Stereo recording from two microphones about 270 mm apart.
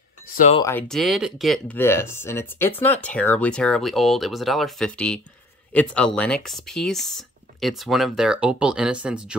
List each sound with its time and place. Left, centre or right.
0.3 s speech: left
0.6 s speech: centre